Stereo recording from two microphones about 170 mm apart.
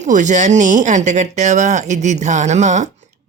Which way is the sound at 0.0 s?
45° right (ahead or behind).